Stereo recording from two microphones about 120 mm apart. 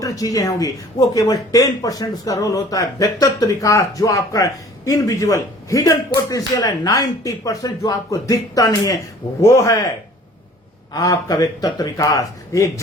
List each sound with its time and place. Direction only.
0.0 s speech: 30° left (ahead or behind)
10.9 s speech: 30° left (ahead or behind)